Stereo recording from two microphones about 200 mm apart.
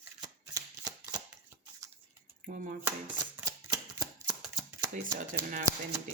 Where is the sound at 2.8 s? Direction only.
15° right (ahead or behind).